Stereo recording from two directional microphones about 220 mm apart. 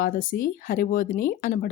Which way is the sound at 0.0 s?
40° left (ahead or behind).